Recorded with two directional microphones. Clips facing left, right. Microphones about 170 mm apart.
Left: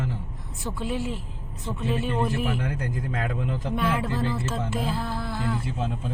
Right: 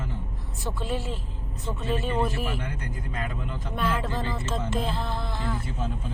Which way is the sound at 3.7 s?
10° left (ahead or behind).